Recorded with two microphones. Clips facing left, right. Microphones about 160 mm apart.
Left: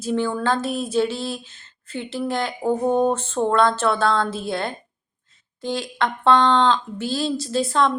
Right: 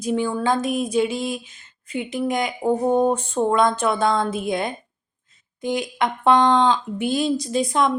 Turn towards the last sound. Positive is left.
turn(degrees=-15)  # may be behind; listen again after turning